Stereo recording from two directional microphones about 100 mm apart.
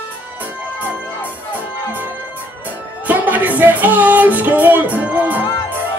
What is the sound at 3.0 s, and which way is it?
Music, 15° right (ahead or behind).